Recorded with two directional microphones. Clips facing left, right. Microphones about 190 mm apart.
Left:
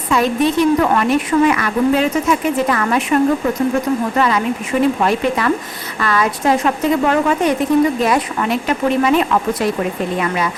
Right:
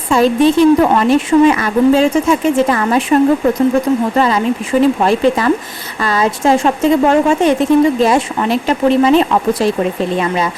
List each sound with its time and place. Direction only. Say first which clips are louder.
0.1 s a woman's voice: right 5 dB; 30° right (ahead or behind)